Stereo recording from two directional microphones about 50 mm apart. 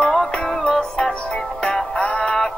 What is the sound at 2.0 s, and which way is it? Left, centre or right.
Music, left.